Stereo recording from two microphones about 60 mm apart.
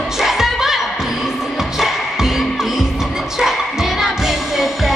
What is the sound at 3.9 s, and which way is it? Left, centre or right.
Music, centre.